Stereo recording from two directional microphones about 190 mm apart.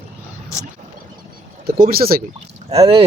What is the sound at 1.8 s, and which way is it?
Speech, 50° right (ahead or behind).